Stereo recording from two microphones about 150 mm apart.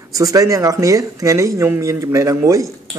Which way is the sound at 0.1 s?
25° right (ahead or behind).